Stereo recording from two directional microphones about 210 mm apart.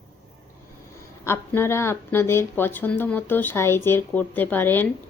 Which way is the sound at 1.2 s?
10° left (ahead or behind).